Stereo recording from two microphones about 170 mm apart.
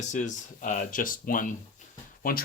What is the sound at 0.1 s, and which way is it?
Speech, 45° left (ahead or behind).